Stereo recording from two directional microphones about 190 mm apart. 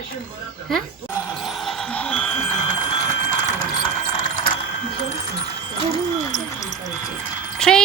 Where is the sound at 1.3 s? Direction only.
Centre (ahead or behind).